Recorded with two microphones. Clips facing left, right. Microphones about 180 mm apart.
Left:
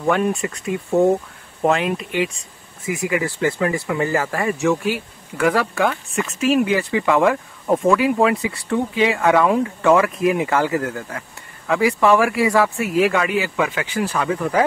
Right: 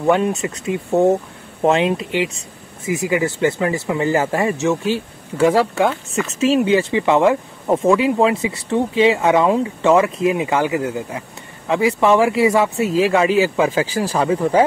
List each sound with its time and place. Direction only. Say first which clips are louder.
0.1 s speech: right 2 dB; 25° right (ahead or behind)